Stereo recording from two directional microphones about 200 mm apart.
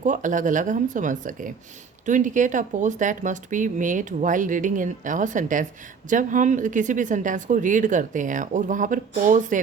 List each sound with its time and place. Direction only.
0.0 s speech: 40° right (ahead or behind)